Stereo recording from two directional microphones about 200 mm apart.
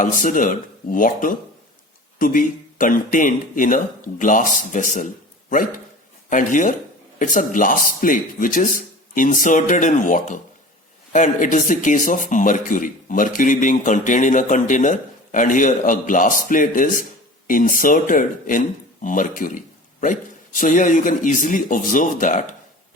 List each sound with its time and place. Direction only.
0.0 s speech: 40° left (ahead or behind)
6.3 s speech: 40° left (ahead or behind)